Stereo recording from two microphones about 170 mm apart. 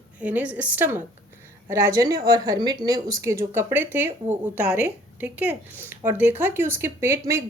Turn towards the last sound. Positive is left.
turn(degrees=-15)  # may be behind; listen again after turning